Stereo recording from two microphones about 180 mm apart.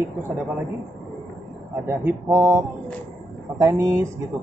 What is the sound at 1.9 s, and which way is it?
A man's voice, 15° right (ahead or behind).